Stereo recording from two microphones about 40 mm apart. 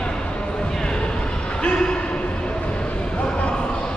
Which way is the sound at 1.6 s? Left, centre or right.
Left.